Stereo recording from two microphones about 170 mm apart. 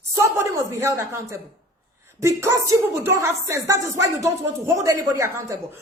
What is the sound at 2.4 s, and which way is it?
A woman's voice, 15° right (ahead or behind).